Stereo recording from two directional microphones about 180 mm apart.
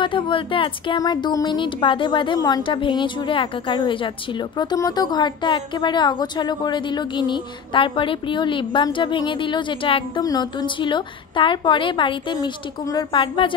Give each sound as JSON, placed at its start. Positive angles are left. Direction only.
{"t": 0.0, "sound": "speech", "side_deg": 30}